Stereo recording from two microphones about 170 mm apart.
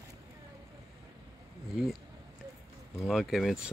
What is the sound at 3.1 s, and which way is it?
Speech, centre (ahead or behind).